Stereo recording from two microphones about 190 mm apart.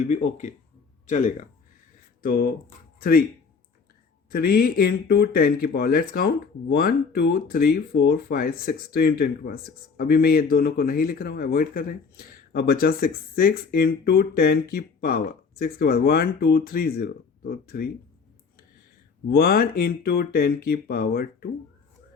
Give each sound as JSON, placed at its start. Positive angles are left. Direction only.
{"t": 0.1, "sound": "speech", "side_deg": 40}
{"t": 4.3, "sound": "speech", "side_deg": 55}
{"t": 19.3, "sound": "speech", "side_deg": 50}